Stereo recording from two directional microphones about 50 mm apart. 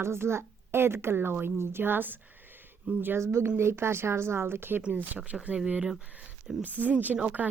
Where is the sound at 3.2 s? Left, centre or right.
Right.